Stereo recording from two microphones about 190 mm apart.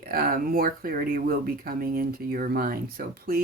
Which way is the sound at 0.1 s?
50° right (ahead or behind).